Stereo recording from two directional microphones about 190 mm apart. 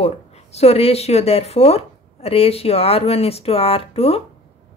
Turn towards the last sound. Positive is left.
turn(degrees=30)  # may be behind; listen again after turning